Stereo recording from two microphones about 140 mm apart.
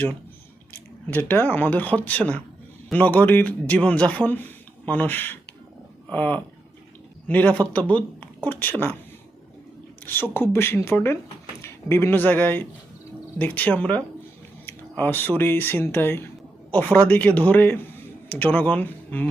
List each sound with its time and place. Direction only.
0.7 s a man's voice: 15° left (ahead or behind)
10.1 s speech: 15° left (ahead or behind)